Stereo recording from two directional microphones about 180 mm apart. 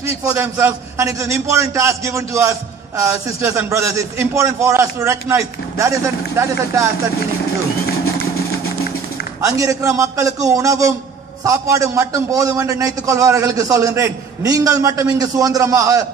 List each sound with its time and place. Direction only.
0.0 s a man's voice: 15° right (ahead or behind)
9.4 s a man's voice: 20° right (ahead or behind)